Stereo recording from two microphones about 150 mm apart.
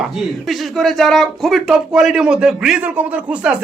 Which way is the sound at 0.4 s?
Centre (ahead or behind).